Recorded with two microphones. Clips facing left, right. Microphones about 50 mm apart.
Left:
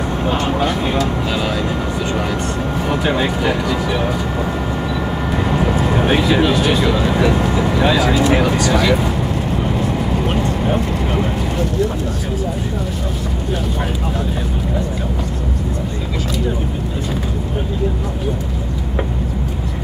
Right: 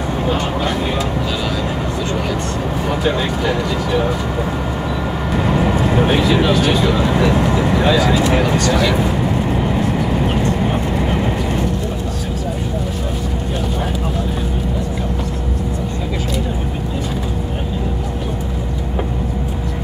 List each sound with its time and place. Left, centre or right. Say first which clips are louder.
3.0 s speech: left 1 dB; centre
5.3 s vehicle: right 2 dB; centre
6.0 s speech: left 2 dB; centre
7.2 s speech: right 1 dB; centre
8.1 s speech: left 1 dB; left
8.4 s speech: even; centre